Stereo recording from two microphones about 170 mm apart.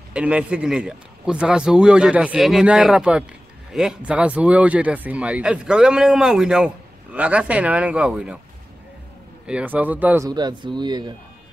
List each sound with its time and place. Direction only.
0.1 s a man's voice: 5° right (ahead or behind)
9.5 s speech: 5° right (ahead or behind)
10.2 s a man's voice: 25° right (ahead or behind)